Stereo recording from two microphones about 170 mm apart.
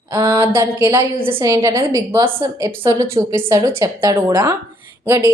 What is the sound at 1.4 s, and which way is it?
A woman's voice, 20° right (ahead or behind).